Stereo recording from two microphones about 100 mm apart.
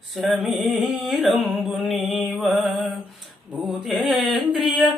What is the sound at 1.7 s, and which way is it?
Music, centre (ahead or behind).